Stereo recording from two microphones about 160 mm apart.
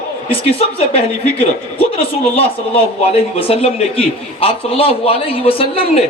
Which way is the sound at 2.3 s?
35° left (ahead or behind).